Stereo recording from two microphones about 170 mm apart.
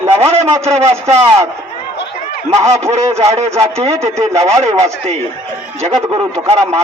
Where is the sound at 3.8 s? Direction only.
15° right (ahead or behind).